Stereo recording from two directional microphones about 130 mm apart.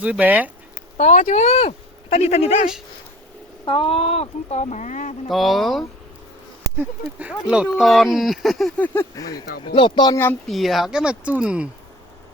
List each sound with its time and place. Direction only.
0.0 s speech: 10° right (ahead or behind)
0.9 s speech: 70° left (ahead or behind)
3.7 s speech: 45° left (ahead or behind); by 5.1 s 75° left (ahead or behind)
5.3 s speech: centre (ahead or behind)
7.2 s speech: 10° right (ahead or behind)
8.8 s a sound: 15° left (ahead or behind)
9.1 s speech: 30° left (ahead or behind)
10.5 s speech: centre (ahead or behind)